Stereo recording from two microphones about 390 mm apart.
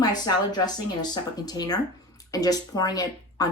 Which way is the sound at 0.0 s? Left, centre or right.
Centre.